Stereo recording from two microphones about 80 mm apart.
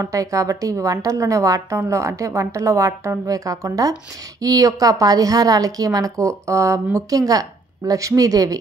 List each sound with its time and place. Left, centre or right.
0.0 s a woman's voice: right